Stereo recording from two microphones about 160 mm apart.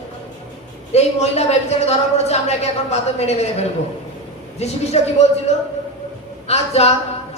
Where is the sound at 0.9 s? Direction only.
45° left (ahead or behind).